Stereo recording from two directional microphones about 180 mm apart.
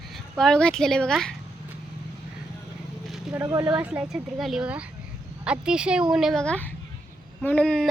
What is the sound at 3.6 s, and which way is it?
Speech, 5° right (ahead or behind).